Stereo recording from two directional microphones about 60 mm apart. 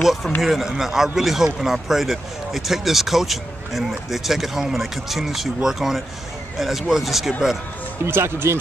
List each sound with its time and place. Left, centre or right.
0.0 s a man's voice: centre
8.0 s speech: right